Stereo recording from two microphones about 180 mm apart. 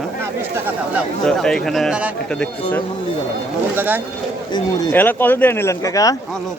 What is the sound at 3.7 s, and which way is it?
Speech, 10° right (ahead or behind).